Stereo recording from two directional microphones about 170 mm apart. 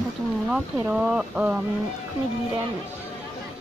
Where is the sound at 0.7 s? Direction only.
10° right (ahead or behind).